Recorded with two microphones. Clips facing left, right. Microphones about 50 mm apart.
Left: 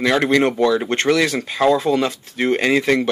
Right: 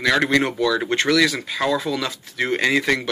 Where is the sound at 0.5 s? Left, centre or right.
Left.